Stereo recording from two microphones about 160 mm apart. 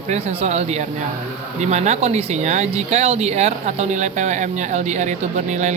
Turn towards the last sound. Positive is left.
turn(degrees=-50)  # may be behind; listen again after turning